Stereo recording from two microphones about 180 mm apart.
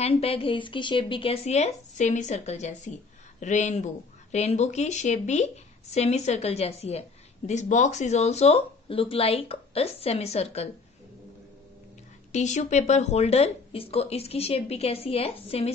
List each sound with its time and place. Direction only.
0.0 s speech: 35° left (ahead or behind)
12.3 s speech: 40° left (ahead or behind)